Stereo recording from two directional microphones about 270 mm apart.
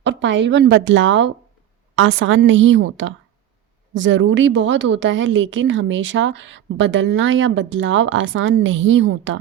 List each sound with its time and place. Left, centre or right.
0.0 s a woman's voice: right